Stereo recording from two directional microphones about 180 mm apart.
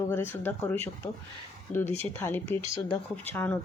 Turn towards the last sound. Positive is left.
turn(degrees=10)  # may be behind; listen again after turning